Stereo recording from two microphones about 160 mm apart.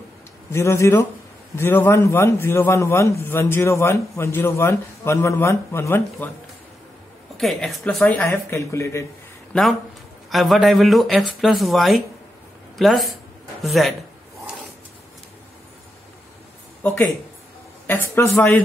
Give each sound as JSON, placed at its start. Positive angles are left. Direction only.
{"t": 0.5, "sound": "a man's voice", "side_deg": 15}
{"t": 7.3, "sound": "a man's voice", "side_deg": 0}
{"t": 9.5, "sound": "speech", "side_deg": 0}
{"t": 16.8, "sound": "a man's voice", "side_deg": 15}